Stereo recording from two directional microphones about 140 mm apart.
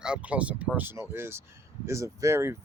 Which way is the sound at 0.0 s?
10° right (ahead or behind).